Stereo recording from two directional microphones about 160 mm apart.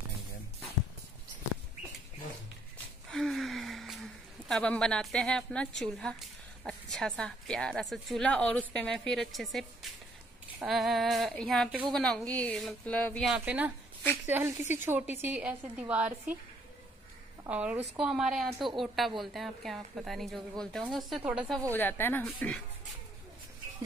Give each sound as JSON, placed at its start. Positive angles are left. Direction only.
{"t": 3.1, "sound": "a woman's voice", "side_deg": 0}
{"t": 13.3, "sound": "a woman's voice", "side_deg": -10}
{"t": 17.5, "sound": "a woman's voice", "side_deg": -10}
{"t": 21.7, "sound": "speech", "side_deg": 10}